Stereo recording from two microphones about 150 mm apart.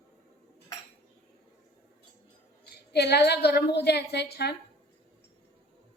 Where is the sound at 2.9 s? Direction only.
90° left.